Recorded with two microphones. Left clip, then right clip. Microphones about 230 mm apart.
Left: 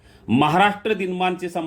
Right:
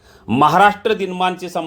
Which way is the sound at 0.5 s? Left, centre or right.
Right.